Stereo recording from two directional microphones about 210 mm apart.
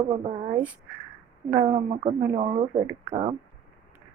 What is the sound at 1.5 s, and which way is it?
Speech, 10° right (ahead or behind).